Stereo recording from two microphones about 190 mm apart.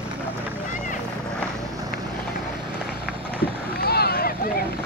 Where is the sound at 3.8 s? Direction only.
55° left (ahead or behind).